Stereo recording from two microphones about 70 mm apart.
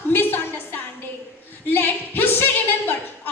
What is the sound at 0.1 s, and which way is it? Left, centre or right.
Music, left.